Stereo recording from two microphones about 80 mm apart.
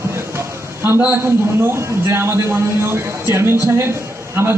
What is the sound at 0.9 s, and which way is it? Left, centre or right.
A man's voice, right.